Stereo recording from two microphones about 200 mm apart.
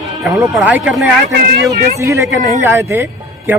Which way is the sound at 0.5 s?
5° right (ahead or behind).